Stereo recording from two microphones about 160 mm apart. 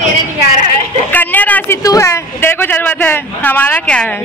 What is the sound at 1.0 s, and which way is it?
Speech, 10° left (ahead or behind).